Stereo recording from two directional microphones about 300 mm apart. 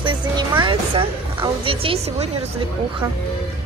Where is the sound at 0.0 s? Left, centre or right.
Centre.